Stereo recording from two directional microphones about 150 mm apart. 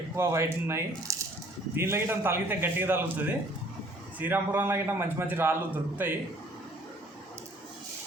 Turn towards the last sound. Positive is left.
turn(degrees=-15)  # may be behind; listen again after turning